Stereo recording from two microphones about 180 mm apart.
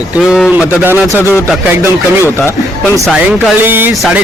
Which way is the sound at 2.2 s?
15° left (ahead or behind).